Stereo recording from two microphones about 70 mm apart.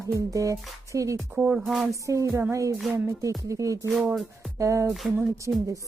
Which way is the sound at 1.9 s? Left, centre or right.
Right.